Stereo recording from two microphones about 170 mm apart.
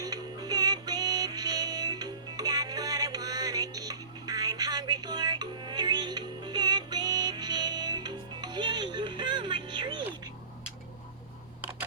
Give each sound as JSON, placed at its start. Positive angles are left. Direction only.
{"t": 0.0, "sound": "music", "side_deg": -20}